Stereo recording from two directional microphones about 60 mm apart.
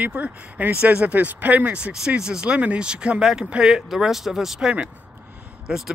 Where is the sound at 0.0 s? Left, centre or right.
Right.